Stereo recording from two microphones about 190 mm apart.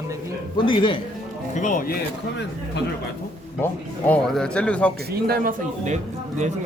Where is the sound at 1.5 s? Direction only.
45° left (ahead or behind).